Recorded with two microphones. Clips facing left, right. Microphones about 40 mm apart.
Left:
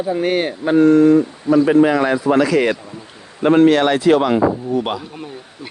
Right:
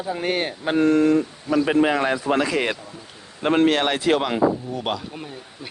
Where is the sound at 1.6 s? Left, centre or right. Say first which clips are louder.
Left 5 dB; centre.